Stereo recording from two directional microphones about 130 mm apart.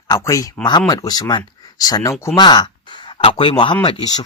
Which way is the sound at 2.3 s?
35° left (ahead or behind).